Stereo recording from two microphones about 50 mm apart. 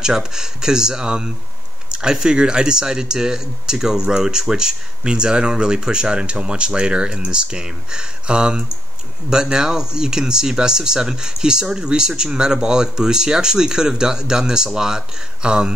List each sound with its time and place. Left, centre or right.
0.0 s speech: centre